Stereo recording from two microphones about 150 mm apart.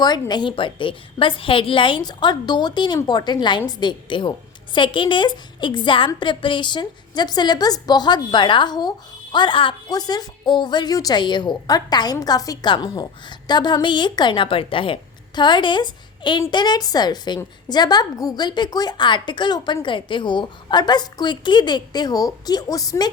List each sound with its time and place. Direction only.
0.0 s a woman's voice: 30° left (ahead or behind)